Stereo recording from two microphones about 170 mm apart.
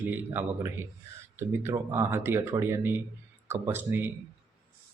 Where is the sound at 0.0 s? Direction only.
10° right (ahead or behind).